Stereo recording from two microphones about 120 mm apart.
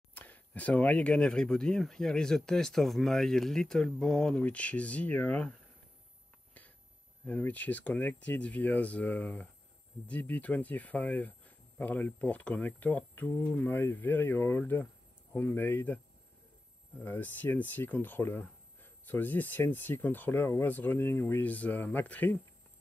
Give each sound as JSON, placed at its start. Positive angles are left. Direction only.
{"t": 0.1, "sound": "speech", "side_deg": 15}
{"t": 7.2, "sound": "speech", "side_deg": 15}
{"t": 17.0, "sound": "speech", "side_deg": 15}